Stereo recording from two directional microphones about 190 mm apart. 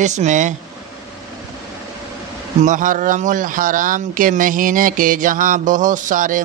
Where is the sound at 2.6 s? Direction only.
40° right (ahead or behind).